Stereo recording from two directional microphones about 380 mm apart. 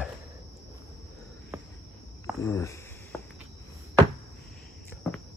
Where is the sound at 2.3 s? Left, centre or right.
Centre.